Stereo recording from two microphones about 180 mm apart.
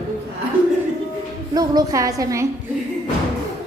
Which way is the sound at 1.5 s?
20° right (ahead or behind).